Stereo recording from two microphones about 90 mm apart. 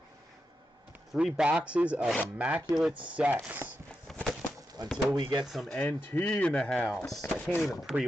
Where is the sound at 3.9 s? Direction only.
15° left (ahead or behind).